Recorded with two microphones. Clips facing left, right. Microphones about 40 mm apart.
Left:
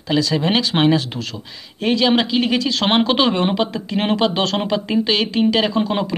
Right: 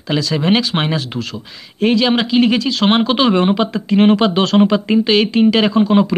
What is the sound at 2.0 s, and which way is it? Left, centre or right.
Speech, centre.